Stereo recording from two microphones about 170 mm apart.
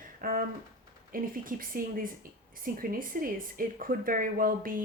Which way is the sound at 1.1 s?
55° right (ahead or behind).